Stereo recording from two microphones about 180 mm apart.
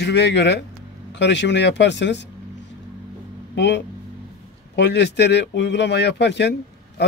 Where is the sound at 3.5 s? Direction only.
75° left (ahead or behind).